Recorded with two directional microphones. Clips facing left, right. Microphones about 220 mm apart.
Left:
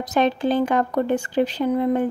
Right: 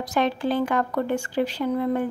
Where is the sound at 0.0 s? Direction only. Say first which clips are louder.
Left 3 dB; 20° left (ahead or behind).